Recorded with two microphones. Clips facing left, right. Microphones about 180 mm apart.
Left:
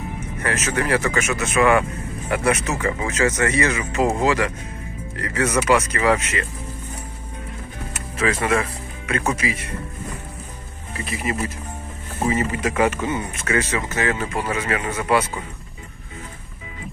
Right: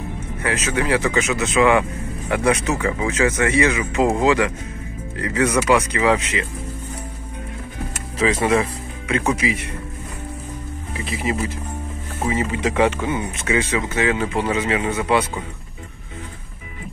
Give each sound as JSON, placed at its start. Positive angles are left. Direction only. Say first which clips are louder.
{"t": 0.4, "sound": "speech", "louder": "right 1 dB", "side_deg": -15}
{"t": 8.3, "sound": "speech", "louder": "right 3 dB", "side_deg": -20}
{"t": 12.3, "sound": "speech", "louder": "right 1 dB", "side_deg": -15}